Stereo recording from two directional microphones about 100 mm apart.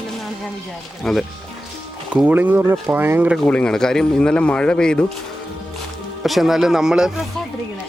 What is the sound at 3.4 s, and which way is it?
Speech, 10° left (ahead or behind).